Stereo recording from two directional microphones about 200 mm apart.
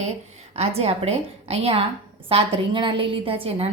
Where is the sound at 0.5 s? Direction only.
30° right (ahead or behind).